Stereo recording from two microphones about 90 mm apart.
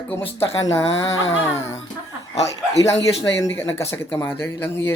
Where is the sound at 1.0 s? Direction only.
40° left (ahead or behind).